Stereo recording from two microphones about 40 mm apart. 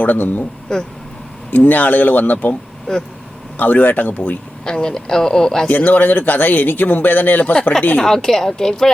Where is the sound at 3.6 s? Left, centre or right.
Left.